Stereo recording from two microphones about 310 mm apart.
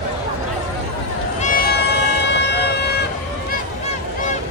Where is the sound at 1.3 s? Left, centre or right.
Left.